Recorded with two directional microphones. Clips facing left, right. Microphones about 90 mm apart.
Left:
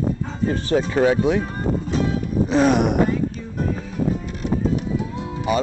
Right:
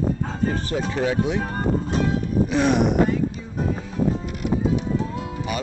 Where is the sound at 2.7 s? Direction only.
55° left (ahead or behind).